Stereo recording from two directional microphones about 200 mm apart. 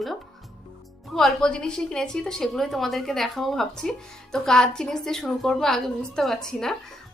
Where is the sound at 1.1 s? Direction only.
5° left (ahead or behind).